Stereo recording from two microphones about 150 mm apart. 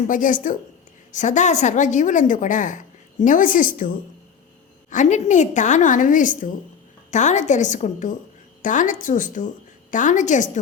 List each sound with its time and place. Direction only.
0.1 s a woman's voice: 60° left (ahead or behind)
4.9 s a woman's voice: 55° left (ahead or behind)